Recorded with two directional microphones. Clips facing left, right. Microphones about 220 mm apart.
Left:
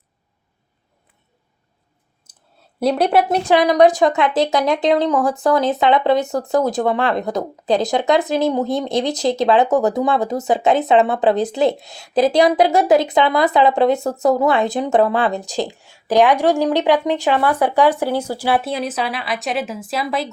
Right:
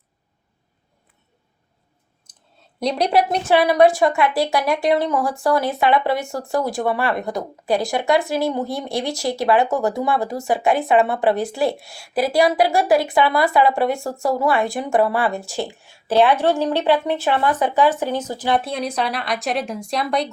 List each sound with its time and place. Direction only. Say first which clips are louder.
2.3 s clicking: left 1 dB; 5° left (ahead or behind)
2.8 s speech: left 3 dB; 5° left (ahead or behind)
3.4 s a woman's voice: left 1 dB; 15° left (ahead or behind)